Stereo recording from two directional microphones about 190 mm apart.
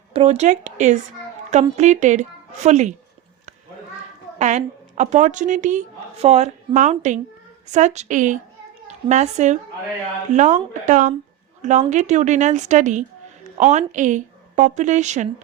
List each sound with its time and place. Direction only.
0.1 s a woman's voice: 35° right (ahead or behind)
4.4 s a woman's voice: 40° right (ahead or behind)